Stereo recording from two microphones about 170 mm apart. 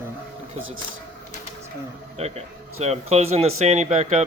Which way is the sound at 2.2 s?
40° right (ahead or behind).